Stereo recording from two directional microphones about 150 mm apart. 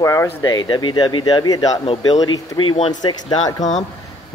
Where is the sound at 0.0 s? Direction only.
20° left (ahead or behind).